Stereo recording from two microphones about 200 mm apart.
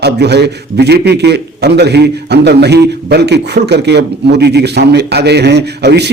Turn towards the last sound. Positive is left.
turn(degrees=-55)  # may be behind; listen again after turning